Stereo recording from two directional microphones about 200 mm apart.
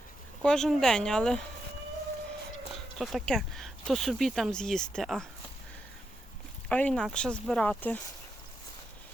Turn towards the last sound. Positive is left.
turn(degrees=5)  # may be behind; listen again after turning